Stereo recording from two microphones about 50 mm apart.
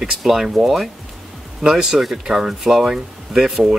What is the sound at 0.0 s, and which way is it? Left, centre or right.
Speech, centre.